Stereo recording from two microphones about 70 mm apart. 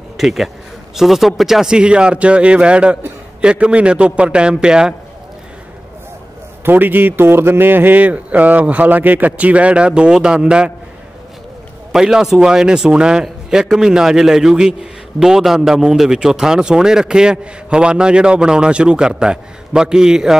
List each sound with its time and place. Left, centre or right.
0.2 s a man's voice: centre
6.6 s a man's voice: right; by 10.7 s centre
11.9 s a man's voice: centre